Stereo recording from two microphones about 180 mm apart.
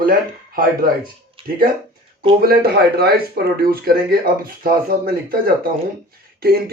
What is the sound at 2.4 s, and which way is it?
Speech, 60° right (ahead or behind).